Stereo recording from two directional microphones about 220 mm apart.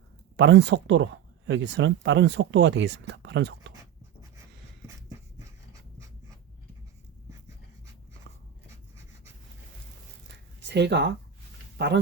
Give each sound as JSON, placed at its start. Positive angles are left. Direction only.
{"t": 0.3, "sound": "speech", "side_deg": -55}
{"t": 10.2, "sound": "zipper", "side_deg": -50}